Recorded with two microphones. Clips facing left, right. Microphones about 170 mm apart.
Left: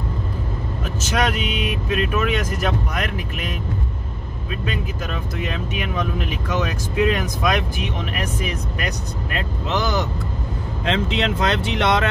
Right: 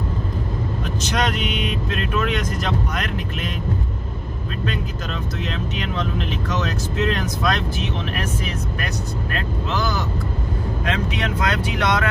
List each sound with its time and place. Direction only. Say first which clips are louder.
1.0 s speech: left 2 dB; 10° left (ahead or behind)
5.4 s speech: left 2 dB; 10° left (ahead or behind)